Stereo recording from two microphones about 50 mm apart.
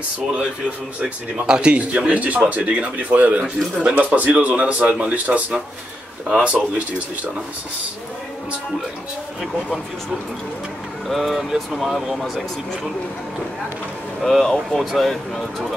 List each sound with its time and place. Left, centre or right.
1.0 s speech: centre
11.1 s speech: centre
14.2 s speech: centre